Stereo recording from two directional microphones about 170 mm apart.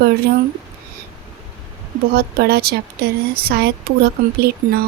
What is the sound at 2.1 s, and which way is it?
A woman's voice, 65° right (ahead or behind).